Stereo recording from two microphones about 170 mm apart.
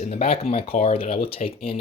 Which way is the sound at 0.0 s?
35° left (ahead or behind).